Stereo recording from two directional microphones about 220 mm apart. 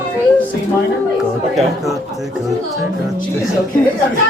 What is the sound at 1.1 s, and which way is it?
Chatter, centre (ahead or behind).